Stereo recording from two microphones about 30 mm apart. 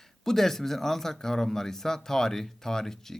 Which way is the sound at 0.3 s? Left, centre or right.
Centre.